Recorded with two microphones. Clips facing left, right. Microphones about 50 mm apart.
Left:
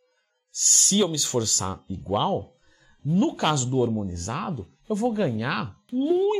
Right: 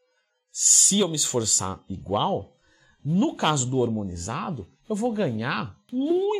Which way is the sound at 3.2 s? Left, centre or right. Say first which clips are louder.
Even; centre.